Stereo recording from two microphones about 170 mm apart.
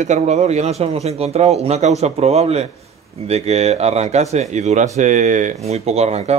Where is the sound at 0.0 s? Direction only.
40° right (ahead or behind).